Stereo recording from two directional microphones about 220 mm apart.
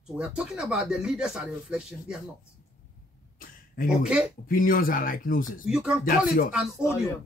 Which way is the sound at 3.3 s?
40° left (ahead or behind).